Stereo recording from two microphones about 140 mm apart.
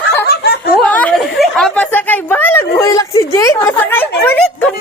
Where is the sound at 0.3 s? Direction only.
90° left.